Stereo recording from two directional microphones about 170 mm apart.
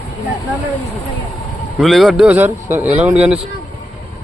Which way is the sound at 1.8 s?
Centre (ahead or behind).